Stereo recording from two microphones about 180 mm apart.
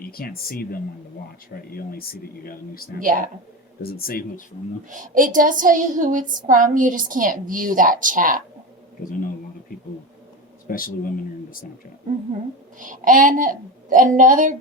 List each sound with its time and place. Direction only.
0.0 s speech: 55° left (ahead or behind)
4.9 s a woman's voice: 50° right (ahead or behind)
9.0 s speech: 50° left (ahead or behind)
12.8 s a woman's voice: 45° right (ahead or behind)